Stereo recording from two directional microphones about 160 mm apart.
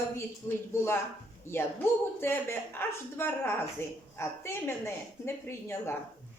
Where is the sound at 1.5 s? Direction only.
15° left (ahead or behind).